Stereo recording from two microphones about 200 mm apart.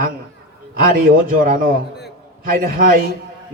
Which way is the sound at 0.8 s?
45° right (ahead or behind).